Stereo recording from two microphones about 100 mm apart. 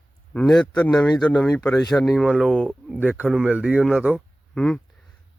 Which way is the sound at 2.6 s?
10° right (ahead or behind).